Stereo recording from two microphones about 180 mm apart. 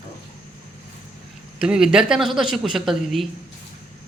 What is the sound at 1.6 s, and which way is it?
Speech, 5° right (ahead or behind).